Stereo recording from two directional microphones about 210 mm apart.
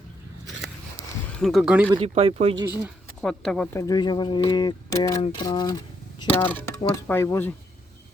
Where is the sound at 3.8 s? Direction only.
20° left (ahead or behind).